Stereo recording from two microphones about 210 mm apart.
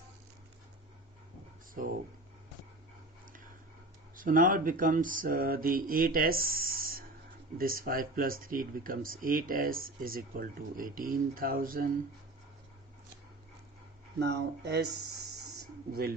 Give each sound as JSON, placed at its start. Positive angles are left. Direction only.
{"t": 4.1, "sound": "speech", "side_deg": -40}
{"t": 14.2, "sound": "speech", "side_deg": -55}
{"t": 15.9, "sound": "speech", "side_deg": -45}